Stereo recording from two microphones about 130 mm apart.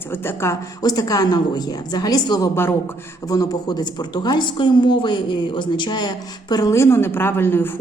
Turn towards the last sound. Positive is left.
turn(degrees=15)  # may be behind; listen again after turning